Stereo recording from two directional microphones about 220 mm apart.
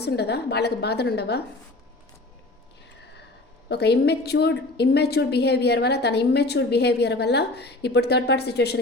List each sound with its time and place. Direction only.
0.0 s a woman's voice: 50° left (ahead or behind)
3.7 s a woman's voice: 50° left (ahead or behind)